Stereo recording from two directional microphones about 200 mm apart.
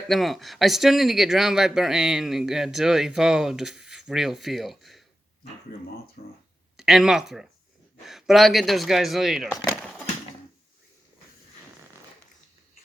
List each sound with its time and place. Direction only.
0.1 s speech: centre (ahead or behind)
6.2 s speech: 40° left (ahead or behind)
6.7 s speech: centre (ahead or behind)
9.6 s a sound: 5° left (ahead or behind)